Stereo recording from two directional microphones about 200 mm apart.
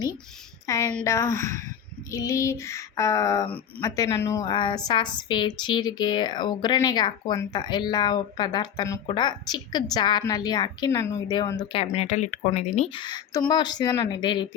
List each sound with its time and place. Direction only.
0.7 s a sound: 15° left (ahead or behind)
3.8 s a woman's voice: 15° left (ahead or behind)
11.7 s a woman's voice: 30° left (ahead or behind)